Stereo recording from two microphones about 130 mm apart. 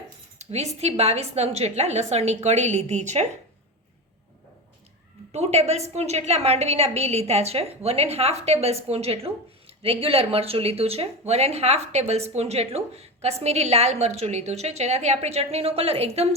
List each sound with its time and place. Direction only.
0.3 s a woman's voice: 55° right (ahead or behind)
5.3 s a woman's voice: 55° right (ahead or behind)